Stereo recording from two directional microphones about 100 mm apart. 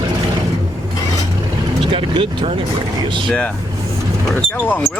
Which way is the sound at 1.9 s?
65° right (ahead or behind).